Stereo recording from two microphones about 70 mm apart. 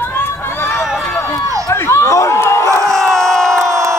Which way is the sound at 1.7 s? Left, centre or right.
Left.